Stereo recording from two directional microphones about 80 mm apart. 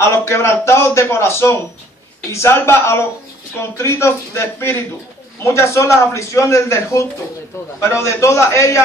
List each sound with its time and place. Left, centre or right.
0.0 s a man's voice: left